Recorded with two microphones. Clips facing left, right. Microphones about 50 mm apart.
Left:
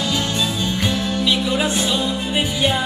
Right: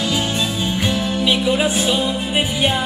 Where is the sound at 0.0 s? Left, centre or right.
Centre.